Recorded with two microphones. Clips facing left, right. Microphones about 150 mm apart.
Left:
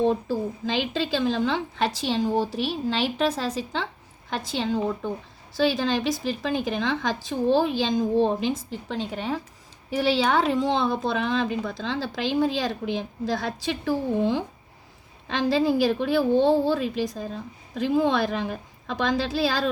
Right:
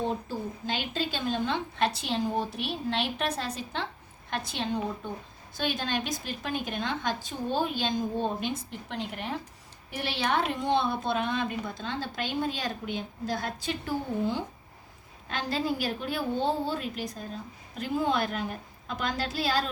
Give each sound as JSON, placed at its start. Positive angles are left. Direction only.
{"t": 0.3, "sound": "a woman's voice", "side_deg": 90}